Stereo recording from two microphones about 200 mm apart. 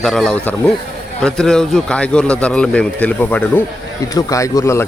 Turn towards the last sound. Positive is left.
turn(degrees=15)  # may be behind; listen again after turning